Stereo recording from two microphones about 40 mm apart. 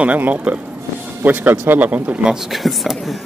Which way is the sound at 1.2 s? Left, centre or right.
Right.